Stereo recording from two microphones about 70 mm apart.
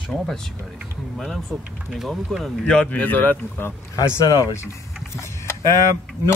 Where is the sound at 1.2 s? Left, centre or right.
Centre.